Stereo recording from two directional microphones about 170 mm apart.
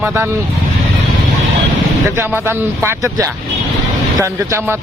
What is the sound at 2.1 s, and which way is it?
Speech, 15° right (ahead or behind).